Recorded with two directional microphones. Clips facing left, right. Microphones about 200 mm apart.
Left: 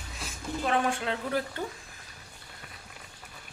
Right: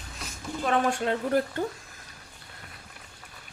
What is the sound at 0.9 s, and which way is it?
Speech, 50° right (ahead or behind).